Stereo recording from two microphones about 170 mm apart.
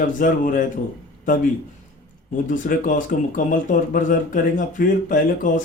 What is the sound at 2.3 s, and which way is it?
Speech, 50° left (ahead or behind).